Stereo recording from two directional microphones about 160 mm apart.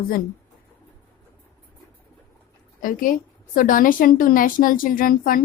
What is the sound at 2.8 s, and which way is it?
A woman's voice, 60° left (ahead or behind).